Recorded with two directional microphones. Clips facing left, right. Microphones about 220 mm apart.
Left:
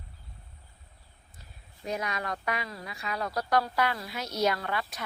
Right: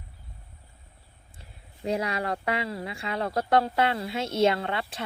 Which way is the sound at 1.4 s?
30° right (ahead or behind).